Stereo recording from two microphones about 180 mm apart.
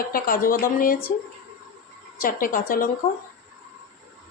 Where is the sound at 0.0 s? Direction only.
55° left (ahead or behind).